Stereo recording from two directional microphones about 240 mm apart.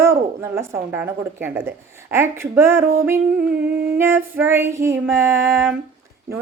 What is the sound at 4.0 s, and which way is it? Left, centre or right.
Speech, centre.